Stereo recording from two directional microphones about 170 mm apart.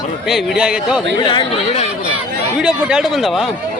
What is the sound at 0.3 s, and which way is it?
Speech, 5° right (ahead or behind).